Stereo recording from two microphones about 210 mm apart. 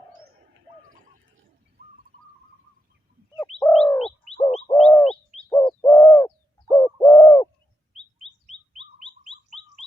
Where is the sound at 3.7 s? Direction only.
Centre (ahead or behind).